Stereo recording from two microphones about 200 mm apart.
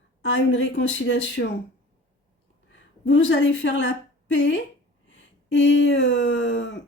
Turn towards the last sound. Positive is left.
turn(degrees=70)  # may be behind; listen again after turning